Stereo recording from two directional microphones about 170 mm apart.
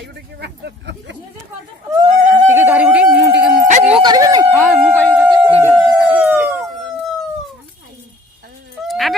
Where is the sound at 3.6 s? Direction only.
45° right (ahead or behind).